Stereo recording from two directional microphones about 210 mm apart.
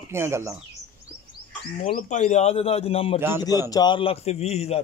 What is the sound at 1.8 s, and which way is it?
A man's voice, 35° left (ahead or behind).